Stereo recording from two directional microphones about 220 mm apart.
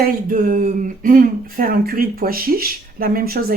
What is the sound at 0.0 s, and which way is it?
Speech, 40° right (ahead or behind).